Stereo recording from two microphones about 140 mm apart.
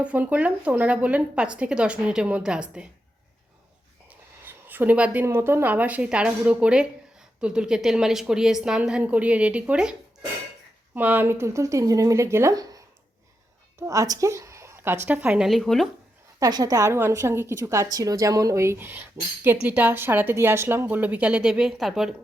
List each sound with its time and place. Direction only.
0.0 s a woman's voice: 10° right (ahead or behind)
4.1 s a sound: 15° right (ahead or behind)
5.2 s a woman's voice: 20° right (ahead or behind)
10.9 s a woman's voice: 15° right (ahead or behind)
16.4 s a woman's voice: 30° right (ahead or behind); by 22.1 s centre (ahead or behind)